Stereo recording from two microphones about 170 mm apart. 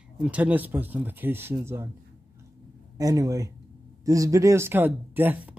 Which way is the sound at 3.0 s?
20° right (ahead or behind).